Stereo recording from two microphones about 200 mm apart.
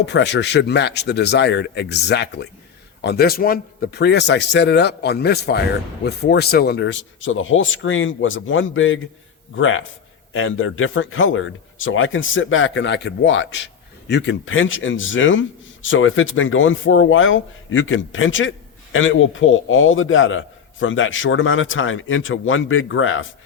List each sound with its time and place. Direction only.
0.0 s a man's voice: 60° left (ahead or behind); by 23.2 s 85° left